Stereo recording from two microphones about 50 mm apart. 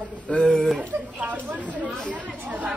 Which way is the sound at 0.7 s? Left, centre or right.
Right.